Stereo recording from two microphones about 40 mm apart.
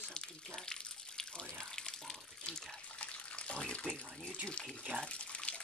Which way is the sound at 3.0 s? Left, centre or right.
Left.